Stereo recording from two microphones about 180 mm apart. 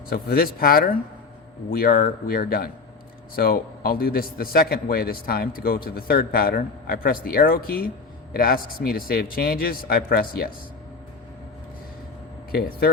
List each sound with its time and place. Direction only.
0.1 s a man's voice: 60° left (ahead or behind)
12.5 s a man's voice: 55° left (ahead or behind)